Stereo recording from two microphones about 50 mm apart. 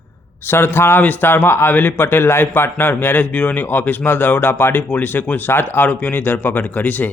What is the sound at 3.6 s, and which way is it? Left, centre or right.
A man's voice, left.